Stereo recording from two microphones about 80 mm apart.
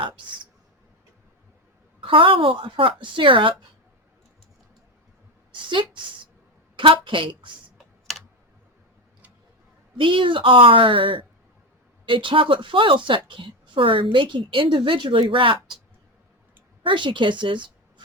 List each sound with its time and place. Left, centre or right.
2.0 s a woman's voice: right
5.6 s a woman's voice: right
10.0 s a woman's voice: right
16.8 s a woman's voice: right